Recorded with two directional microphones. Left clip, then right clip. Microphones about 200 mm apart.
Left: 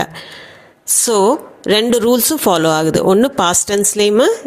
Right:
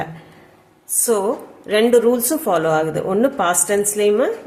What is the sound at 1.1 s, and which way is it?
A woman's voice, 45° left (ahead or behind).